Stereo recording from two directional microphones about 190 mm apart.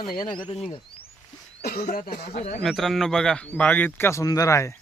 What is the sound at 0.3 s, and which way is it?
Speech, 25° left (ahead or behind).